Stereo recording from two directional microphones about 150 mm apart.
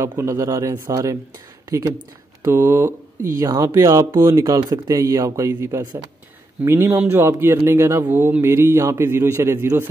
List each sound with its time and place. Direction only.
0.0 s speech: 20° right (ahead or behind)
2.4 s a man's voice: 15° right (ahead or behind)